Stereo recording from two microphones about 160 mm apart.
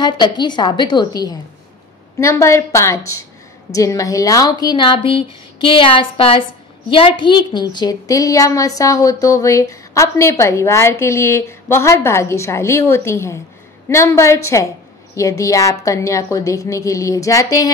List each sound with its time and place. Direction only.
0.0 s a woman's voice: 30° left (ahead or behind)